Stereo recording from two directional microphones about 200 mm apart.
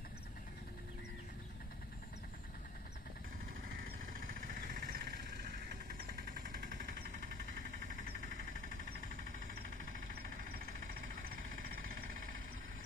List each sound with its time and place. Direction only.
4.2 s vehicle: 40° right (ahead or behind)